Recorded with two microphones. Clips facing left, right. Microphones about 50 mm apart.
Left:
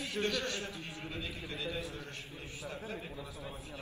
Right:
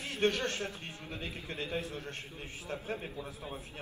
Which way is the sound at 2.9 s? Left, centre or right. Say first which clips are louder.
Right 4 dB; right.